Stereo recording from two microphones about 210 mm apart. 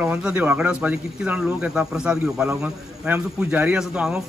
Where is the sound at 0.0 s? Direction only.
5° right (ahead or behind).